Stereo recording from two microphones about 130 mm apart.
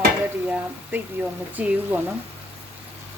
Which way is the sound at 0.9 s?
15° right (ahead or behind).